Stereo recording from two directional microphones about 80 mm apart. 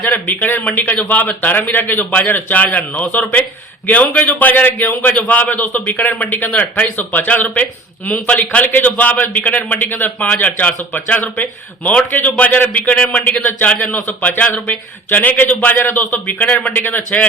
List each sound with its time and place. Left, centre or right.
0.0 s a man's voice: left